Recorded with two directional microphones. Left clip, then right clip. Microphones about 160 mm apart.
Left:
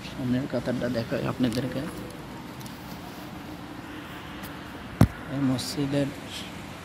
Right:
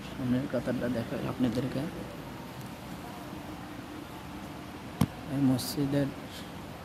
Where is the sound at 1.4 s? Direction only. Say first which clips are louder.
Left 1 dB; 10° left (ahead or behind).